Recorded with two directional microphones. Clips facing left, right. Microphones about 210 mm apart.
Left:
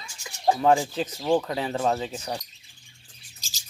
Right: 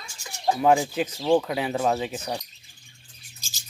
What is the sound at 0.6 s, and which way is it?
Speech, 10° right (ahead or behind).